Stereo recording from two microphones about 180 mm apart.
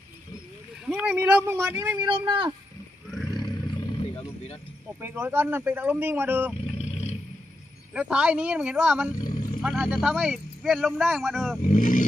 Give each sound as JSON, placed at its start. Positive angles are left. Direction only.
{"t": 0.8, "sound": "speech", "side_deg": -10}
{"t": 2.0, "sound": "speech", "side_deg": -25}
{"t": 3.3, "sound": "roaring cats", "side_deg": 25}
{"t": 5.0, "sound": "speech", "side_deg": -10}
{"t": 6.8, "sound": "roaring cats", "side_deg": 35}
{"t": 7.9, "sound": "speech", "side_deg": -5}
{"t": 9.2, "sound": "roaring cats", "side_deg": 50}
{"t": 9.6, "sound": "speech", "side_deg": 0}
{"t": 11.6, "sound": "speech", "side_deg": 45}